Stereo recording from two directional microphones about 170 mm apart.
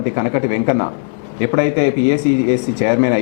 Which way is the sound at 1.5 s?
10° left (ahead or behind).